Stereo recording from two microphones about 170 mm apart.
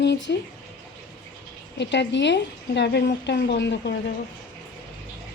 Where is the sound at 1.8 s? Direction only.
90° left.